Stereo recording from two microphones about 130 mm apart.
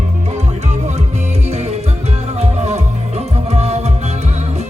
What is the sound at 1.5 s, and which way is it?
Music, 55° right (ahead or behind).